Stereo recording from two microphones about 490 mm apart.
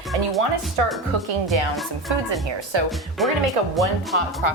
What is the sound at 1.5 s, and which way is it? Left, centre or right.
Speech, right.